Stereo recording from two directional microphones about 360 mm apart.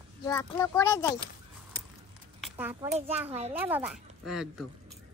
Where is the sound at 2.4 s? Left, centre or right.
Centre.